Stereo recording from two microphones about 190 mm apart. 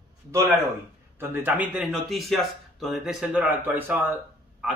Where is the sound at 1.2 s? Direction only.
10° right (ahead or behind).